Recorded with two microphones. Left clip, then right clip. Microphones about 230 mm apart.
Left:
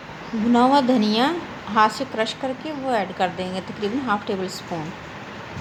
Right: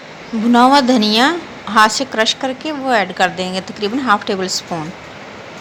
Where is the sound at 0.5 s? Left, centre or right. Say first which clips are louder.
Right 7 dB; centre.